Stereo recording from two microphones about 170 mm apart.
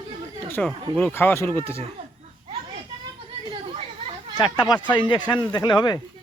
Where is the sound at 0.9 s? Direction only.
10° left (ahead or behind).